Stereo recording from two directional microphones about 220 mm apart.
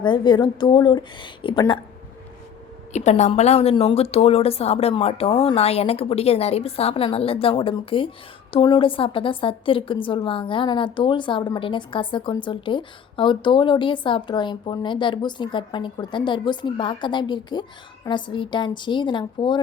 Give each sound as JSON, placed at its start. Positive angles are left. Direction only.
{"t": 0.0, "sound": "a woman's voice", "side_deg": 20}
{"t": 2.9, "sound": "a woman's voice", "side_deg": 30}